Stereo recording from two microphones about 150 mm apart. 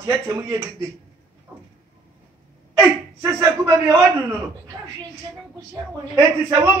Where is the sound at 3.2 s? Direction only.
20° right (ahead or behind).